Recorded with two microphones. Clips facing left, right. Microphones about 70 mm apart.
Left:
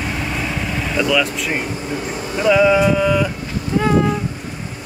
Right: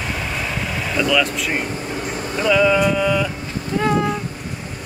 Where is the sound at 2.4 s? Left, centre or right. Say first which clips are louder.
Left 3 dB; centre.